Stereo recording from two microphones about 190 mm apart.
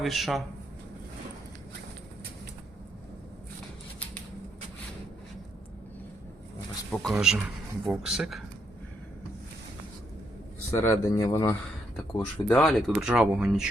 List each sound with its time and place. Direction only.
0.0 s speech: centre (ahead or behind)
6.9 s speech: centre (ahead or behind)
10.9 s speech: 20° left (ahead or behind); by 13.7 s 5° right (ahead or behind)